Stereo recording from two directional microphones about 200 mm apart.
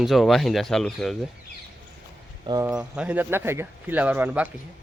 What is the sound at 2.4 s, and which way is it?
Speech, 15° right (ahead or behind).